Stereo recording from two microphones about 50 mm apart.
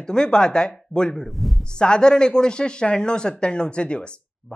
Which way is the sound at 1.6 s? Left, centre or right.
Centre.